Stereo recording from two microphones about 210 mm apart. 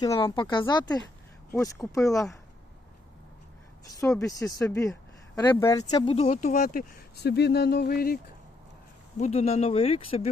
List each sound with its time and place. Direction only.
0.0 s speech: 15° left (ahead or behind)
4.2 s speech: 15° left (ahead or behind); by 8.2 s 45° left (ahead or behind)
9.1 s speech: 30° left (ahead or behind)